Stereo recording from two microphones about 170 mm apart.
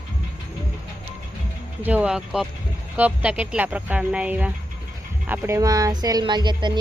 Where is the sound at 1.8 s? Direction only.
10° right (ahead or behind).